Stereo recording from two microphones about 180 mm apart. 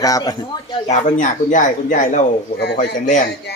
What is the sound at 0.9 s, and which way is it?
Speech, 45° left (ahead or behind).